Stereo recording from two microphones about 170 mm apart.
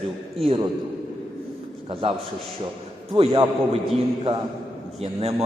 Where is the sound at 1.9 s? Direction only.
35° right (ahead or behind).